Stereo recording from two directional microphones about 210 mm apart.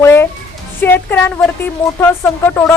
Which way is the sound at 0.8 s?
10° left (ahead or behind).